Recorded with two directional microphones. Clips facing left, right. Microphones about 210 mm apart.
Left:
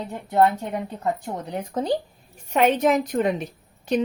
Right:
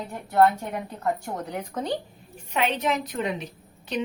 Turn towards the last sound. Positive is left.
turn(degrees=45)  # may be behind; listen again after turning